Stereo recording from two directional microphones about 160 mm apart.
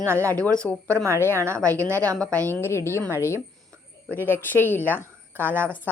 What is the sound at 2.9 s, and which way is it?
A woman's voice, 15° left (ahead or behind).